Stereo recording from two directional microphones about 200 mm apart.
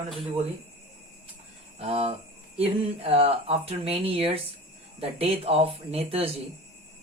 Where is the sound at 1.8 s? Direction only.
30° right (ahead or behind).